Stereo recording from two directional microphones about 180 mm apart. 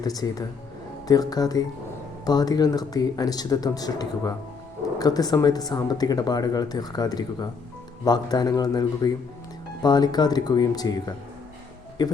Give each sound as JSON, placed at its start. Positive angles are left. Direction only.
{"t": 0.0, "sound": "speech", "side_deg": 20}